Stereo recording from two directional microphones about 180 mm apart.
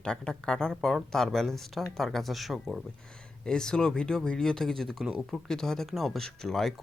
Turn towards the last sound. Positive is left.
turn(degrees=0)  # may be behind; listen again after turning